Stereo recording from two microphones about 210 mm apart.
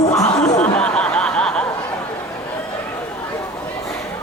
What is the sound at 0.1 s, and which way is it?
Music, 15° left (ahead or behind).